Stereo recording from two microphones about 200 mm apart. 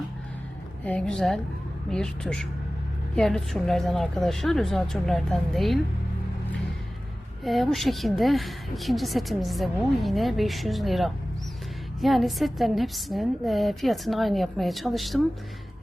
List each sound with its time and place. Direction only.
0.9 s a woman's voice: 5° left (ahead or behind)
7.4 s a woman's voice: centre (ahead or behind)